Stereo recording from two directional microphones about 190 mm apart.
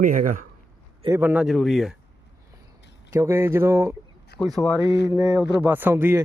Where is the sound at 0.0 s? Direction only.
45° right (ahead or behind).